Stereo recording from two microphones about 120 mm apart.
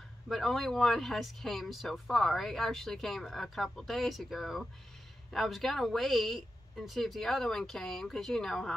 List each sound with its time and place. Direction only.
0.3 s speech: centre (ahead or behind)